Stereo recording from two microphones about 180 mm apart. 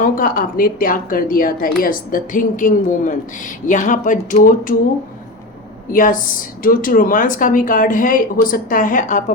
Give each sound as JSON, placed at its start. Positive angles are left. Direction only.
{"t": 0.0, "sound": "speech", "side_deg": 50}
{"t": 5.9, "sound": "speech", "side_deg": 50}